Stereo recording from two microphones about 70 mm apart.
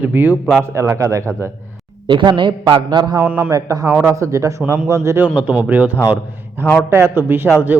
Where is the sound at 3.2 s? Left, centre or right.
Right.